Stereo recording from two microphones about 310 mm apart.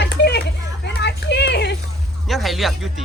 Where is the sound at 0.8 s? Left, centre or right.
Left.